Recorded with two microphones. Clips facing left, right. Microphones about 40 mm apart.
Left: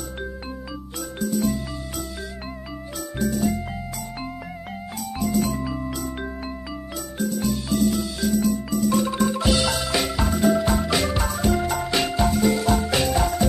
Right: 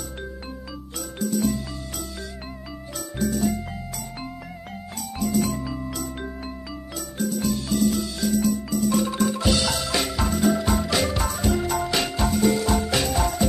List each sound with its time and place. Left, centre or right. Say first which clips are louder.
1.2 s music: even; centre
3.2 s music: left 1 dB; centre
5.2 s music: even; centre